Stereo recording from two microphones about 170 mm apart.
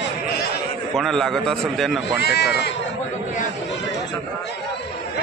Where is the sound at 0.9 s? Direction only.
Centre (ahead or behind).